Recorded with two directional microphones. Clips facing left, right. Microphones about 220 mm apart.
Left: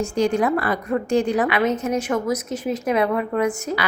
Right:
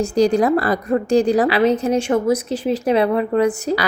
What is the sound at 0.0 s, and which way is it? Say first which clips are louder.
A woman's voice: right 4 dB; 35° right (ahead or behind).